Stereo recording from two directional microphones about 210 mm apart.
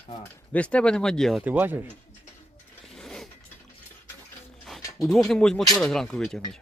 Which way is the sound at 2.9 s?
Centre (ahead or behind).